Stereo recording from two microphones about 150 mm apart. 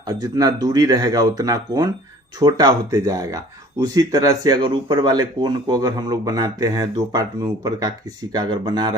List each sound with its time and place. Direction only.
0.1 s speech: 25° right (ahead or behind)